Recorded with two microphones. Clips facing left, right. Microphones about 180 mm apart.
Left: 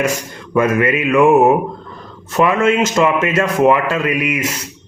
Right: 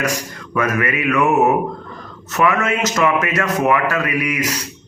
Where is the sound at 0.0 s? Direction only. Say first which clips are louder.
Left 3 dB; 25° left (ahead or behind).